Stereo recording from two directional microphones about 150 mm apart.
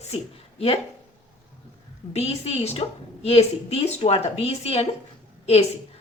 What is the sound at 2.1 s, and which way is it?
A woman's voice, 45° left (ahead or behind).